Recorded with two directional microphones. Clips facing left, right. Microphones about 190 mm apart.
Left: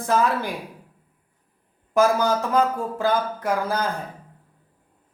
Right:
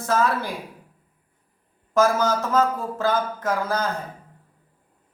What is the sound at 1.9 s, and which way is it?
A man's voice, 15° left (ahead or behind).